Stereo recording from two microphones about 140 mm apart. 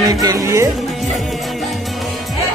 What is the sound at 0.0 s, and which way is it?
Speech, 25° right (ahead or behind).